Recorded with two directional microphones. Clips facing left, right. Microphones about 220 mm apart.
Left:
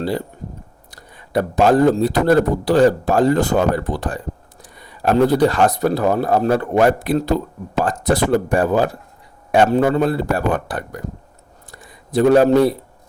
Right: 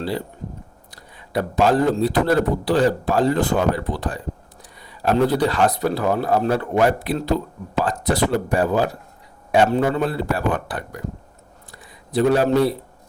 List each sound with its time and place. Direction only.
0.9 s a man's voice: 45° left (ahead or behind)
12.1 s a man's voice: 45° left (ahead or behind)